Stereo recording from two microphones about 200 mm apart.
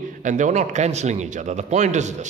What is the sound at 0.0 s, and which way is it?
A man's voice, 40° right (ahead or behind).